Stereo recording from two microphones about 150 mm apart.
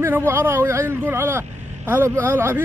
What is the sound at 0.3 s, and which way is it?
Speech, 15° right (ahead or behind).